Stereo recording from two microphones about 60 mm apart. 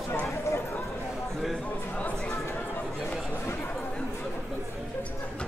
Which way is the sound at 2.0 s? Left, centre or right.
Left.